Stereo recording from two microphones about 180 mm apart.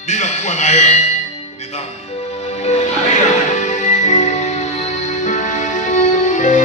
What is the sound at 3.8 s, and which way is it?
Music, 40° left (ahead or behind).